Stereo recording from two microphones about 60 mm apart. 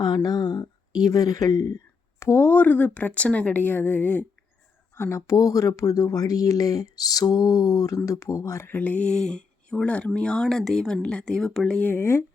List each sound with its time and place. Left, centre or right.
0.1 s speech: left
2.1 s speech: left
2.5 s speech: left
4.9 s speech: left
7.9 s speech: left
8.7 s speech: left
9.0 s speech: centre
11.9 s speech: left